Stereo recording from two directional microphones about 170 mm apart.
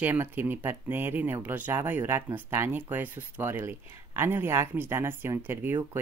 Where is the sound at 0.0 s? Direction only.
10° right (ahead or behind).